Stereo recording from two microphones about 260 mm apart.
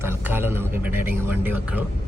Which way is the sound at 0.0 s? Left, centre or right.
Centre.